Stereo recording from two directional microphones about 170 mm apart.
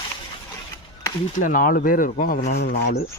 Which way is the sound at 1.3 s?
50° left (ahead or behind).